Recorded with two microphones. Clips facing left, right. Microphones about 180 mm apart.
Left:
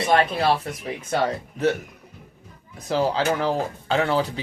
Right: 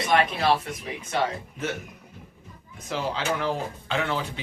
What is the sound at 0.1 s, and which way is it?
Speech, 35° left (ahead or behind).